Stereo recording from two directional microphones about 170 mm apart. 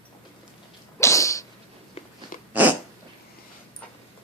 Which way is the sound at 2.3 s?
55° left (ahead or behind).